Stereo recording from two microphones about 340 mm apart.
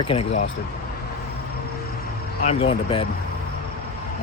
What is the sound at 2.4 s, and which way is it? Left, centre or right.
Speech, centre.